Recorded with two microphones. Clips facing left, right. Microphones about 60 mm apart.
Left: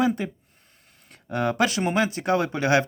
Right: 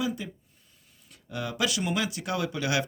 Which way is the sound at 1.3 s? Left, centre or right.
Left.